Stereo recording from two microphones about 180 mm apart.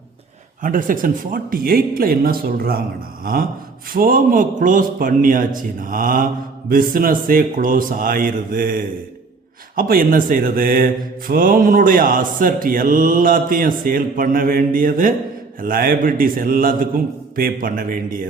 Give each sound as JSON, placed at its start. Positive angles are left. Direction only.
{"t": 0.6, "sound": "speech", "side_deg": -50}
{"t": 3.9, "sound": "speech", "side_deg": -50}